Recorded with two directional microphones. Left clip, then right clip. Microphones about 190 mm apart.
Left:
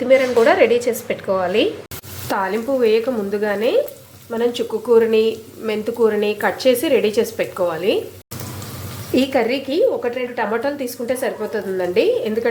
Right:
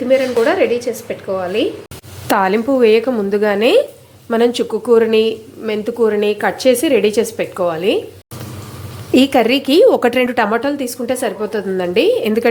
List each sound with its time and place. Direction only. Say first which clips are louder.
0.1 s a woman's voice: even; centre (ahead or behind)
2.2 s a woman's voice: right 6 dB; 25° right (ahead or behind)
4.7 s a woman's voice: even; 15° right (ahead or behind)
9.1 s a woman's voice: right 5 dB; 20° right (ahead or behind)
10.0 s a woman's voice: right 8 dB; 35° right (ahead or behind)